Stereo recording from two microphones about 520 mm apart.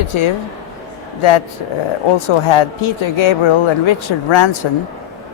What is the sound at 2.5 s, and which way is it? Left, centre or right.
Speech, left.